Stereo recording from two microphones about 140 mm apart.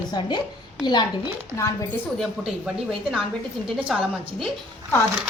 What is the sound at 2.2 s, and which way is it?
Speech, centre (ahead or behind).